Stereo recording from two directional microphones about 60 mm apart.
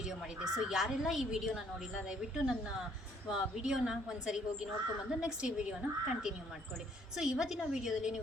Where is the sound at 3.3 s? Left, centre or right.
Centre.